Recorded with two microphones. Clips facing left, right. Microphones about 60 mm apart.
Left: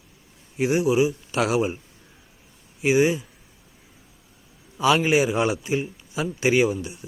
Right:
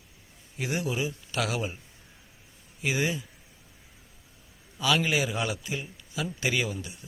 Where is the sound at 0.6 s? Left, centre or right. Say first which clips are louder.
Left 10 dB; centre.